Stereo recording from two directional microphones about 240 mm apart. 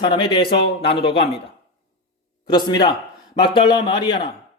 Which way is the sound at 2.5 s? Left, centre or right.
Centre.